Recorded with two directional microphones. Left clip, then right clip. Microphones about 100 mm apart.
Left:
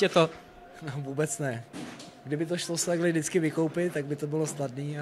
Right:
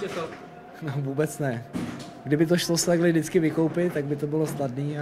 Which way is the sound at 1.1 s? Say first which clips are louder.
Right 3 dB; 55° left (ahead or behind).